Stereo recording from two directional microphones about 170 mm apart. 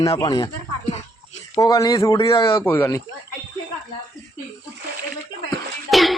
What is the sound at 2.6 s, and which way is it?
Speech, 15° left (ahead or behind).